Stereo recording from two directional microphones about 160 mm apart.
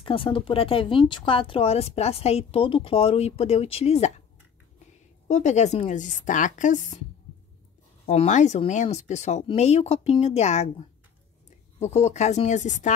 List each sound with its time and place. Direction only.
0.0 s speech: 35° left (ahead or behind)
5.3 s a woman's voice: 45° left (ahead or behind)
8.1 s a woman's voice: 45° left (ahead or behind)